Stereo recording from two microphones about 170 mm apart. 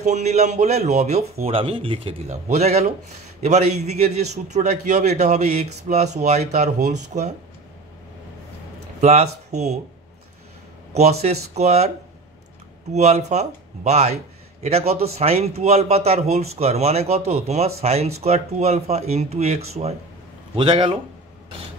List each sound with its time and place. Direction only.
0.0 s a man's voice: 40° right (ahead or behind)
9.0 s speech: 40° right (ahead or behind)
10.9 s a man's voice: 40° right (ahead or behind)
12.9 s a man's voice: 40° right (ahead or behind)